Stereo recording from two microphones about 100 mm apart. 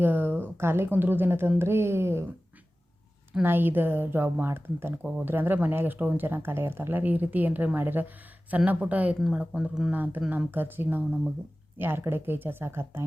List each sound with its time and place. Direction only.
0.0 s speech: 20° right (ahead or behind)
3.4 s speech: 20° right (ahead or behind)
9.9 s speech: 20° right (ahead or behind)